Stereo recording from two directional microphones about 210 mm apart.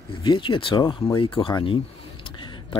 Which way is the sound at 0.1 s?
25° left (ahead or behind).